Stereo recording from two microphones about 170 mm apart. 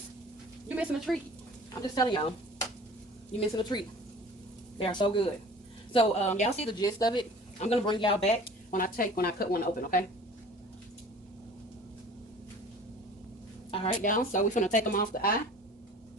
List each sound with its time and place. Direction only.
0.8 s speech: centre (ahead or behind)
2.0 s a woman's voice: 25° left (ahead or behind); by 6.7 s 40° left (ahead or behind)
6.7 s speech: 25° left (ahead or behind)
7.6 s a woman's voice: 35° left (ahead or behind)
8.7 s speech: 55° left (ahead or behind)
13.7 s speech: 45° left (ahead or behind)